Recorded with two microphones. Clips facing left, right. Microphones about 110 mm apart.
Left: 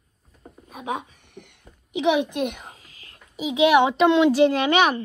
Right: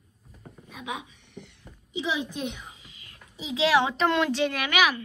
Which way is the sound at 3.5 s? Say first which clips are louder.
Left 6 dB; 20° left (ahead or behind).